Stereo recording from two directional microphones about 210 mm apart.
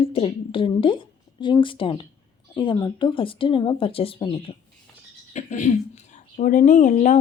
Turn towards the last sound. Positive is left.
turn(degrees=35)  # may be behind; listen again after turning